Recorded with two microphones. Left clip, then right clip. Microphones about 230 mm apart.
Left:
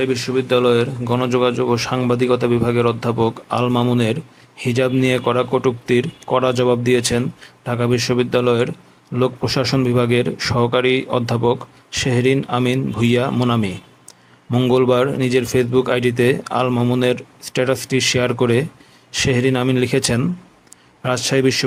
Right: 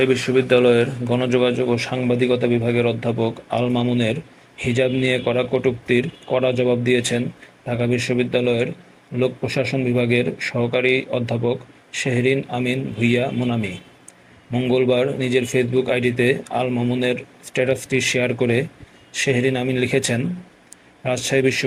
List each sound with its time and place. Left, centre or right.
0.0 s speech: centre
21.0 s speech: left